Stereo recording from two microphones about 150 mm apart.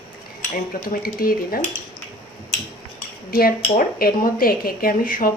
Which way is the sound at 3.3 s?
80° left.